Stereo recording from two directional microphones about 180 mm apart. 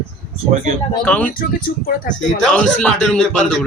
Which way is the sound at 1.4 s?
50° left (ahead or behind).